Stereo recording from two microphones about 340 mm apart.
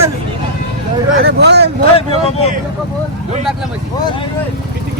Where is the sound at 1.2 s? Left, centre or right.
Right.